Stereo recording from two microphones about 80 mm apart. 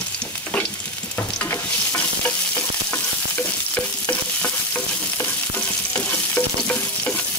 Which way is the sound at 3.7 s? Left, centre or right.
Centre.